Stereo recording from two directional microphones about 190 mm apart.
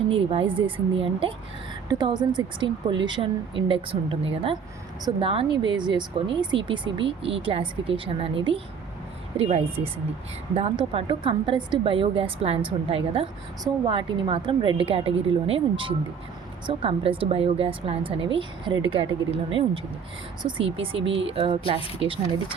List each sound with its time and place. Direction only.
0.1 s speech: 30° right (ahead or behind)